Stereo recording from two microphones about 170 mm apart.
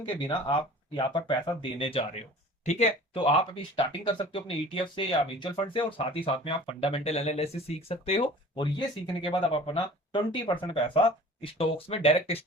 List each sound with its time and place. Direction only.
0.1 s speech: 25° left (ahead or behind)